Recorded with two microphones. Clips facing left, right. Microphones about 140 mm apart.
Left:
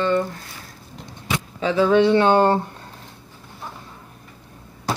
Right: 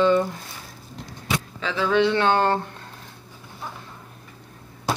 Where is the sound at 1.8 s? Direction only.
35° left (ahead or behind).